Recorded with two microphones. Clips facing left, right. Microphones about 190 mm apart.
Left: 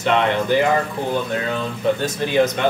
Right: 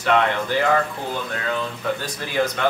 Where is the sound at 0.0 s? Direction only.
20° left (ahead or behind).